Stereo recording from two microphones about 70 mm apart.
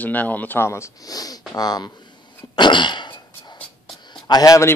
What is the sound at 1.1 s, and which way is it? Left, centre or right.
Speech, left.